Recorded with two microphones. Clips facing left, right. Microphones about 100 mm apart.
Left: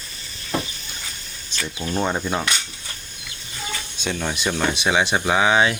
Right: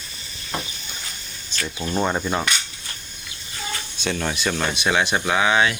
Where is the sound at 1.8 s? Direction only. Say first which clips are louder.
Right 1 dB; 5° right (ahead or behind).